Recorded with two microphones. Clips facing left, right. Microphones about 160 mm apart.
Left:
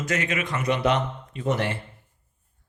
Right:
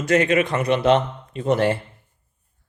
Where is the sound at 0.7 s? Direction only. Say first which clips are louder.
Right 4 dB; 30° right (ahead or behind).